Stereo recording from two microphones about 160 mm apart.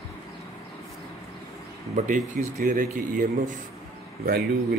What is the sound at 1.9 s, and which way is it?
Speech, 50° right (ahead or behind).